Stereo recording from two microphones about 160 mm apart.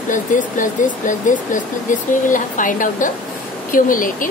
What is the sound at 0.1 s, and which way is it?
Speech, 55° left (ahead or behind).